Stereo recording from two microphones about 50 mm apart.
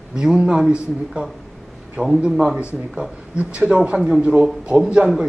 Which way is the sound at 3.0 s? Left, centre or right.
Right.